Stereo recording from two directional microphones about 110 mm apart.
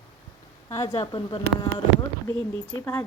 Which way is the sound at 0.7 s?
35° left (ahead or behind).